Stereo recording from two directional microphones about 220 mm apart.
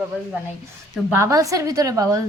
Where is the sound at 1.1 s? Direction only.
15° right (ahead or behind).